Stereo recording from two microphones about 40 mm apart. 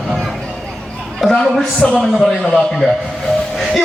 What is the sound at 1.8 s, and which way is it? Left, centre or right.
Speech, centre.